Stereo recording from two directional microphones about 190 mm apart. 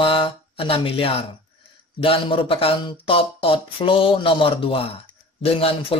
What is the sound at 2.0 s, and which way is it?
Speech, 30° left (ahead or behind).